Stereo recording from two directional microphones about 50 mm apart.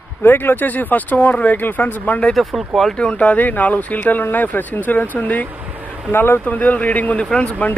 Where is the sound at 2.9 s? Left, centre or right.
Left.